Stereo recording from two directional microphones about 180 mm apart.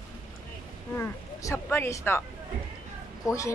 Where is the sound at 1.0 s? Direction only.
10° left (ahead or behind).